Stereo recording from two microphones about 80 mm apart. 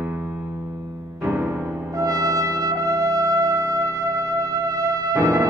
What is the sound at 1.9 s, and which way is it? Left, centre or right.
Music, right.